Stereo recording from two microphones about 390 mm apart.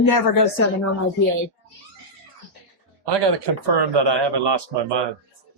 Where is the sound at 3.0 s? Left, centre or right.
Right.